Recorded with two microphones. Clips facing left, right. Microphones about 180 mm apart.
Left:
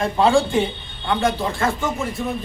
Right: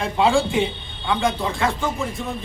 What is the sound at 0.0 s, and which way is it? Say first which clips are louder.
Speech: left 2 dB; centre (ahead or behind).